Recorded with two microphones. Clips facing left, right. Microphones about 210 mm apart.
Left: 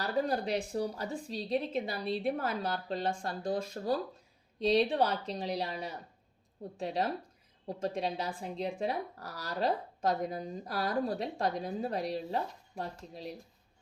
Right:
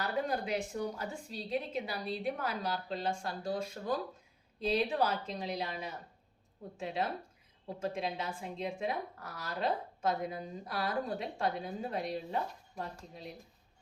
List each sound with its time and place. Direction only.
0.0 s speech: 35° left (ahead or behind)
3.7 s speech: 35° left (ahead or behind)